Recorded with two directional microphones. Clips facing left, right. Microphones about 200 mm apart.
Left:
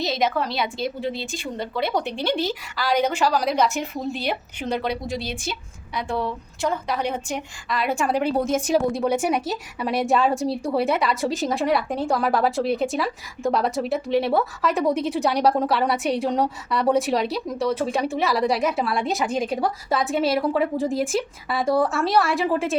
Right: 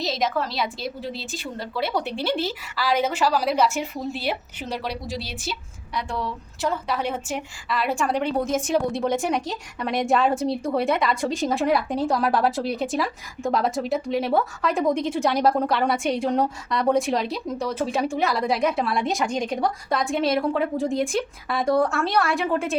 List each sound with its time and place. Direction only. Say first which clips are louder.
0.0 s a woman's voice: left 2 dB; centre (ahead or behind)
5.1 s a woman's voice: left 3 dB; 50° left (ahead or behind)
5.4 s a woman's voice: left 1 dB; centre (ahead or behind)